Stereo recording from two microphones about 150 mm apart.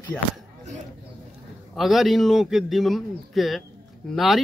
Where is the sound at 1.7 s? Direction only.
Centre (ahead or behind).